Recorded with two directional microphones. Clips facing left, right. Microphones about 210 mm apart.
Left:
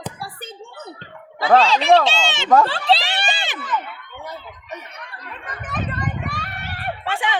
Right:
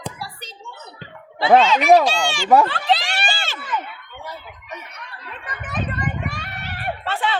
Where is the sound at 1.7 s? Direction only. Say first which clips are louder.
Right 1 dB; 30° left (ahead or behind).